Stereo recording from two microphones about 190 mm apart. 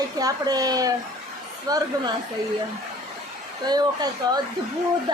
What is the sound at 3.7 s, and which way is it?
Speech, 20° right (ahead or behind).